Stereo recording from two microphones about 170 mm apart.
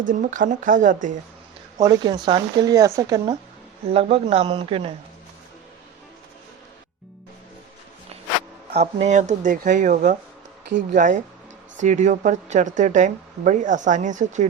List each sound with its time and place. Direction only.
0.0 s speech: 50° right (ahead or behind)
1.8 s speech: 25° right (ahead or behind)
3.8 s speech: 35° right (ahead or behind)
8.7 s speech: 40° right (ahead or behind)